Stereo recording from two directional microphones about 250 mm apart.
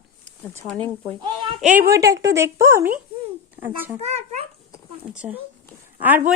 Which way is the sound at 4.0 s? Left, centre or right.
Right.